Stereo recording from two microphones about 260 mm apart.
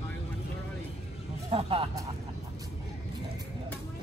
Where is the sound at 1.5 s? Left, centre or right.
Right.